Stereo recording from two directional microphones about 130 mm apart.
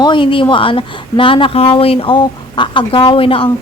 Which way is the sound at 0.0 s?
40° left (ahead or behind).